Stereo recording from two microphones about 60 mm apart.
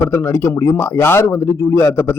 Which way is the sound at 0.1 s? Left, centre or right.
Left.